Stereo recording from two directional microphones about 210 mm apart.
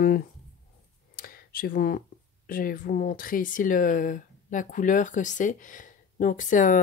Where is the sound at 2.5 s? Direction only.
40° left (ahead or behind).